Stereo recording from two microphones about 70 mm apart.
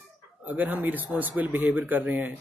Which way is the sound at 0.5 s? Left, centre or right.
Right.